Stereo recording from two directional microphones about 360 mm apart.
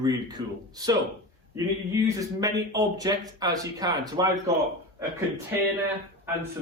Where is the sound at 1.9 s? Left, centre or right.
Centre.